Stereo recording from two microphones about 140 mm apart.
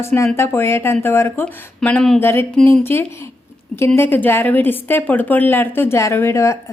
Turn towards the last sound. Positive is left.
turn(degrees=20)  # may be behind; listen again after turning